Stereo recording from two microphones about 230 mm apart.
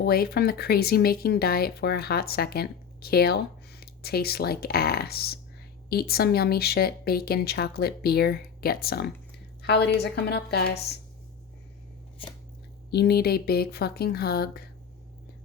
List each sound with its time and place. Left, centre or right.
0.0 s speech: left
12.2 s a sound: left
12.9 s speech: left